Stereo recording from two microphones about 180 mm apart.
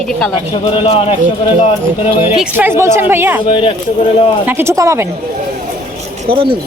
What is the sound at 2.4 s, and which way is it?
A woman's voice, 10° right (ahead or behind).